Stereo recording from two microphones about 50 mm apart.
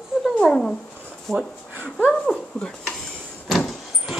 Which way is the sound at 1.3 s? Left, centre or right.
Centre.